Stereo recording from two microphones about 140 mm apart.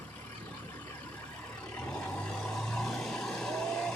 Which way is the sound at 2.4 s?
5° left (ahead or behind).